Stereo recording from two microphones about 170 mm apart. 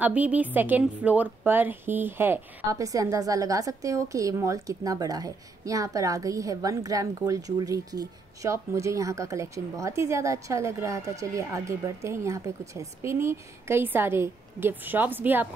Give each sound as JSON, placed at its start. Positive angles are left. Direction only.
{"t": 0.0, "sound": "a woman's voice", "side_deg": -10}